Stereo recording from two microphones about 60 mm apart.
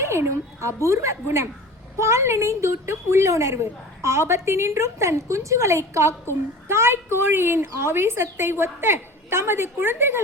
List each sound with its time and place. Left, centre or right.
0.0 s a woman's voice: right